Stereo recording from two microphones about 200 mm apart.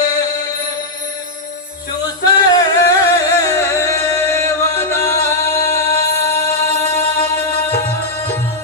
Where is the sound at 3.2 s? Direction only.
15° left (ahead or behind).